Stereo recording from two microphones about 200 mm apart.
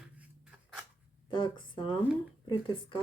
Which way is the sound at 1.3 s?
25° left (ahead or behind).